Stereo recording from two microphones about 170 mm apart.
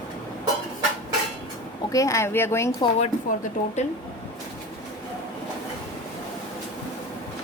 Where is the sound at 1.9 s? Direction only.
20° left (ahead or behind).